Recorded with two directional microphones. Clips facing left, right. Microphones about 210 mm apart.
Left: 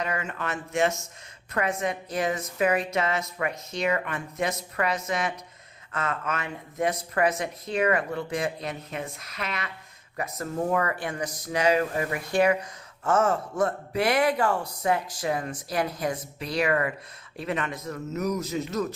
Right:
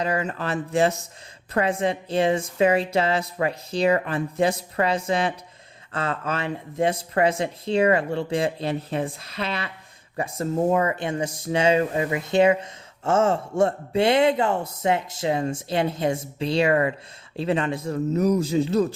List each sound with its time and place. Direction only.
0.0 s a woman's voice: 35° right (ahead or behind)